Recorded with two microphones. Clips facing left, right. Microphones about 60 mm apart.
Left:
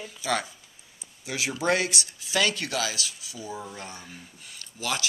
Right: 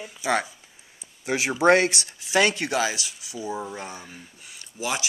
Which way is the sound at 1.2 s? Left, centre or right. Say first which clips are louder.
Right 7 dB; right.